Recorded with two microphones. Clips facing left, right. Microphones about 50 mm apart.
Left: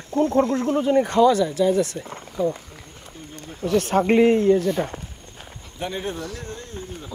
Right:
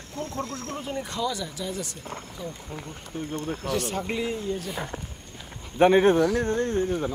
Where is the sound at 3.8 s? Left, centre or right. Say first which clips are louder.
Left 16 dB; left.